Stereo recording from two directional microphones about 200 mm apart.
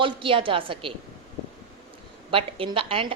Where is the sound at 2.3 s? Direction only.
25° right (ahead or behind).